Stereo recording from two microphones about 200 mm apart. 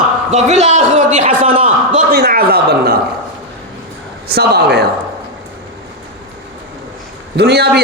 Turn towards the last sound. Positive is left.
turn(degrees=-55)  # may be behind; listen again after turning